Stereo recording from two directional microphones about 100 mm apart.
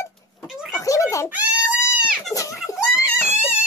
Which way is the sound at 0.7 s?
30° left (ahead or behind).